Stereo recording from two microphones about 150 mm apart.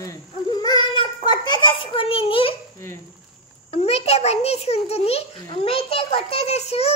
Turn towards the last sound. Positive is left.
turn(degrees=45)  # may be behind; listen again after turning